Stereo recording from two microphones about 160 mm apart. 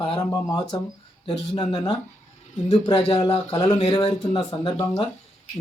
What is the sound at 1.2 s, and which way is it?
Speech, 30° left (ahead or behind).